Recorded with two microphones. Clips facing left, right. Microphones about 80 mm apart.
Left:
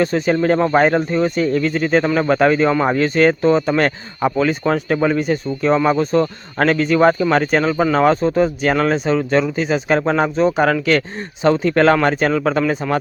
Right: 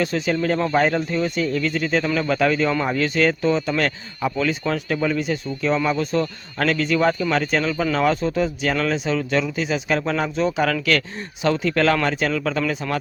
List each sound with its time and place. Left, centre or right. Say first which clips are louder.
0.0 s speech: left 5 dB; left